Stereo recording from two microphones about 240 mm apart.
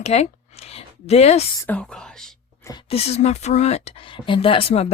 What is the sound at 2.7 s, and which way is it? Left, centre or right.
Speech, left.